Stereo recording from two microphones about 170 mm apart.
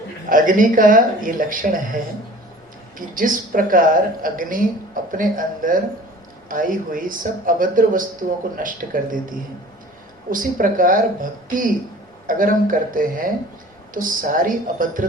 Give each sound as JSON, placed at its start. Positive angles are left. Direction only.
{"t": 0.3, "sound": "speech", "side_deg": -50}
{"t": 3.2, "sound": "speech", "side_deg": -50}
{"t": 10.2, "sound": "speech", "side_deg": -50}